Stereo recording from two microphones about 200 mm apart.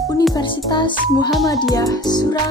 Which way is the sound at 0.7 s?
20° left (ahead or behind).